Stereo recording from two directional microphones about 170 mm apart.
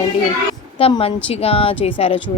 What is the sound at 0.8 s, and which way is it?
Speech, 35° left (ahead or behind).